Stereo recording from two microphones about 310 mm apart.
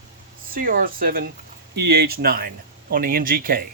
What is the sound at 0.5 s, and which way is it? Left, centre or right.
Speech, right.